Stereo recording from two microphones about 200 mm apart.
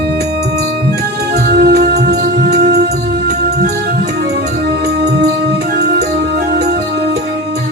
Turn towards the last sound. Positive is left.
turn(degrees=-55)  # may be behind; listen again after turning